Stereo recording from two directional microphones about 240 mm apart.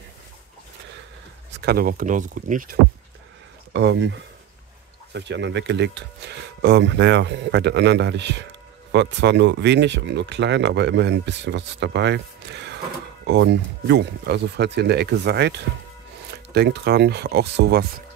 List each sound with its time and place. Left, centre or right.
1.5 s speech: right
3.7 s speech: right